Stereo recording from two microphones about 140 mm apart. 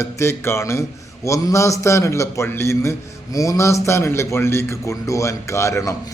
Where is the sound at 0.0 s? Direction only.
20° left (ahead or behind).